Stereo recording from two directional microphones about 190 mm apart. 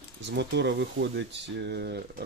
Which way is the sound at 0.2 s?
65° right (ahead or behind).